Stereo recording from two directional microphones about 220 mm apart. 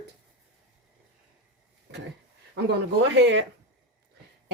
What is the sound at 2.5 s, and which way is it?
Speech, 50° right (ahead or behind).